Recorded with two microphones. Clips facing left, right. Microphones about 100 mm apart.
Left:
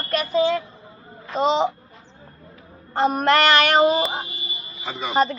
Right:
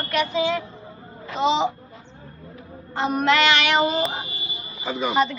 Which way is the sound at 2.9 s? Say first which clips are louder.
Left 2 dB; 45° left (ahead or behind).